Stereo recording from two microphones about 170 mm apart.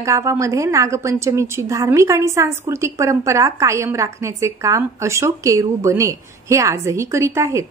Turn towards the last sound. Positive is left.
turn(degrees=-15)  # may be behind; listen again after turning